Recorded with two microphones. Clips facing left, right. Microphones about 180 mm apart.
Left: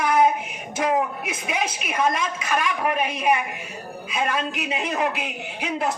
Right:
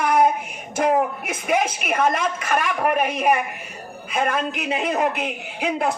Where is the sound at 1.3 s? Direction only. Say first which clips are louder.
Right 5 dB; 55° right (ahead or behind).